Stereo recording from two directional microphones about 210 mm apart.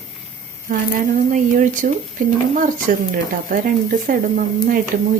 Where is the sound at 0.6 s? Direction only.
40° right (ahead or behind).